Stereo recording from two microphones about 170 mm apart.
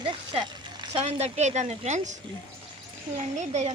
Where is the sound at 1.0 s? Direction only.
40° right (ahead or behind).